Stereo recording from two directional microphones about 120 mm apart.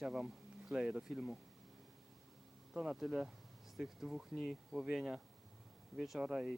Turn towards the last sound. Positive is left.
turn(degrees=-5)  # may be behind; listen again after turning